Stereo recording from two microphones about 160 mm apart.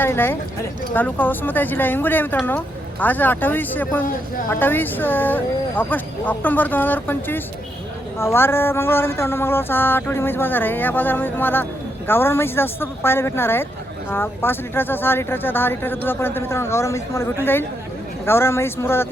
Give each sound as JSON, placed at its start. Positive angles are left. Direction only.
{"t": 0.0, "sound": "speech", "side_deg": 15}